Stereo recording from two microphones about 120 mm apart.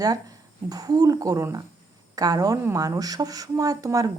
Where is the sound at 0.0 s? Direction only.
30° right (ahead or behind).